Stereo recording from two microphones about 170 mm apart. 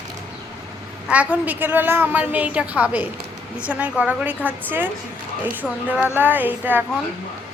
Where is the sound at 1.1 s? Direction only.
10° right (ahead or behind).